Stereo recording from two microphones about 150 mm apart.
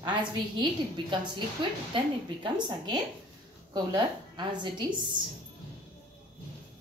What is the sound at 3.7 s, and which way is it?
A woman's voice, 30° right (ahead or behind).